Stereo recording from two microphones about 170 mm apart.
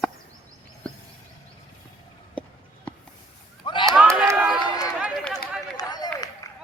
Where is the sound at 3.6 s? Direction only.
30° left (ahead or behind).